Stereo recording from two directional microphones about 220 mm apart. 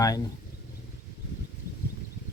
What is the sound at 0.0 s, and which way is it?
Speech, 15° left (ahead or behind).